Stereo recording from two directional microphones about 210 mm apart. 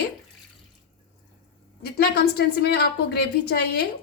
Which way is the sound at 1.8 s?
50° left (ahead or behind).